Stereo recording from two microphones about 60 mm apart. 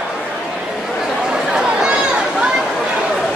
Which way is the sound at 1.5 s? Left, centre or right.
Centre.